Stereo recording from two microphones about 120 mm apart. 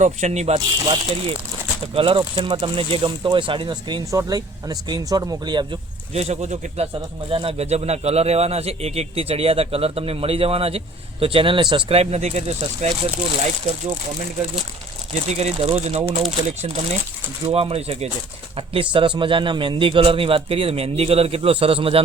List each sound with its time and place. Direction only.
0.0 s speech: 75° right (ahead or behind)
0.9 s speech: 50° right (ahead or behind); by 5.6 s 35° right (ahead or behind)
6.1 s speech: 65° right (ahead or behind)
7.3 s speech: 50° right (ahead or behind); by 13.9 s 65° right (ahead or behind)
15.1 s speech: 65° right (ahead or behind)
17.4 s speech: 55° right (ahead or behind)